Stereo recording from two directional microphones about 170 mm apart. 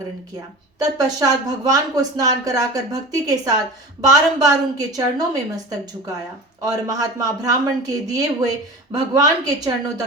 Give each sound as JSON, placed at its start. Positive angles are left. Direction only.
{"t": 0.8, "sound": "speech", "side_deg": -20}